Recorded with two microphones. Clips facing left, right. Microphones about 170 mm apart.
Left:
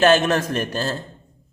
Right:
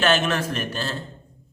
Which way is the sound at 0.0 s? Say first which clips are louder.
Left 5 dB; 40° left (ahead or behind).